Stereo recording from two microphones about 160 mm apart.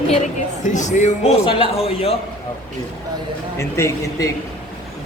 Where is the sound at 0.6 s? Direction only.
50° left (ahead or behind).